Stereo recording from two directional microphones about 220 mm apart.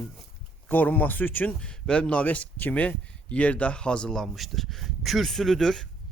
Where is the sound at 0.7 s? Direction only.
10° left (ahead or behind).